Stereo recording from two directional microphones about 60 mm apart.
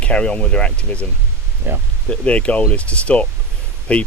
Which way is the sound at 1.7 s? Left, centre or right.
Right.